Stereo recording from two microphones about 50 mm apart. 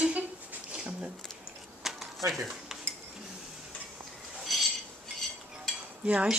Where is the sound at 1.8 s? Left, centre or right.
Centre.